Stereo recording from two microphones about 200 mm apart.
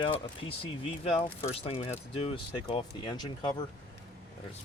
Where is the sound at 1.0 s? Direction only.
30° left (ahead or behind).